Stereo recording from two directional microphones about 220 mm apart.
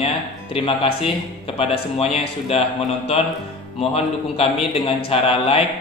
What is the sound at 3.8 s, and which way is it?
A man's voice, 25° left (ahead or behind).